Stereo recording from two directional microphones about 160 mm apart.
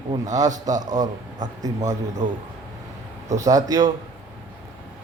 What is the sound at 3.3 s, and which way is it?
Speech, 20° right (ahead or behind).